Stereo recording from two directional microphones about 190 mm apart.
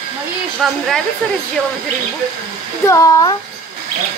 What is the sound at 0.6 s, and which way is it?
Speech, centre (ahead or behind).